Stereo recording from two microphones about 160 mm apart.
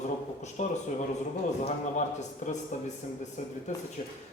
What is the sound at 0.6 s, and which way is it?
Speech, 45° left (ahead or behind).